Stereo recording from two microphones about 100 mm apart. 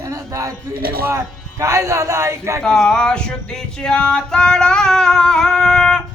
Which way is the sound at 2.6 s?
5° left (ahead or behind).